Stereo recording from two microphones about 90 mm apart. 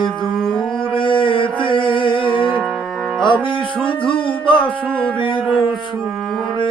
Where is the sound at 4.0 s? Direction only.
70° left (ahead or behind).